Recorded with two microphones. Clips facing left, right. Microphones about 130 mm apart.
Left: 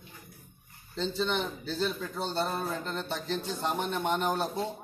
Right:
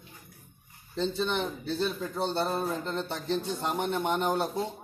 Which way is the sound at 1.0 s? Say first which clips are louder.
Right 1 dB; 20° right (ahead or behind).